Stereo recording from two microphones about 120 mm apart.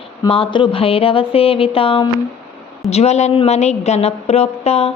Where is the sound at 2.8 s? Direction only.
65° left (ahead or behind).